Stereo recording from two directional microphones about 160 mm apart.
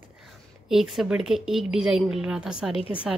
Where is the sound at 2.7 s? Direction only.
35° left (ahead or behind).